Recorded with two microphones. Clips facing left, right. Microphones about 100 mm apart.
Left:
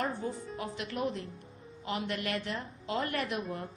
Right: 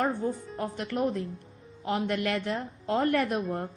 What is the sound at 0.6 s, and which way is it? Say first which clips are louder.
A woman's voice: right 6 dB; 55° right (ahead or behind).